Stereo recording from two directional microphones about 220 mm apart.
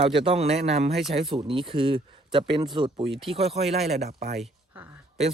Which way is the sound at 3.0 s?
Centre (ahead or behind).